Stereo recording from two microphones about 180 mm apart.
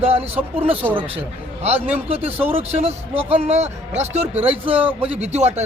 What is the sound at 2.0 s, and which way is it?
A man's voice, 35° right (ahead or behind).